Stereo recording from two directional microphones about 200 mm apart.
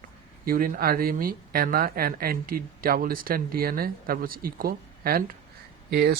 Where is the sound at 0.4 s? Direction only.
45° right (ahead or behind).